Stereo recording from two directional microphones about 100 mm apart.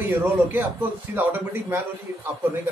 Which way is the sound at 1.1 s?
20° right (ahead or behind).